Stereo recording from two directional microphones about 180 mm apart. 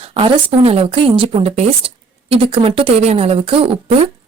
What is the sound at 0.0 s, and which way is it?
A woman's voice, 30° right (ahead or behind).